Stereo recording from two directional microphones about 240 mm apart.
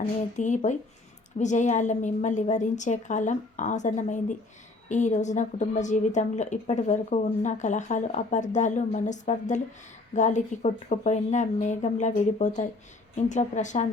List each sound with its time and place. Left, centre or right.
0.3 s a woman's voice: left